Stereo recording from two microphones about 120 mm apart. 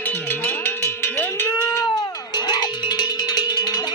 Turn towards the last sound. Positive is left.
turn(degrees=35)  # may be behind; listen again after turning